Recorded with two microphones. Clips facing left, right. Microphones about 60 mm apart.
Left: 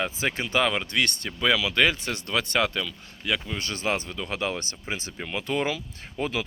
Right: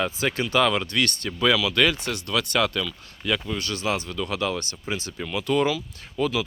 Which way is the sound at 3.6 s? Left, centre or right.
Left.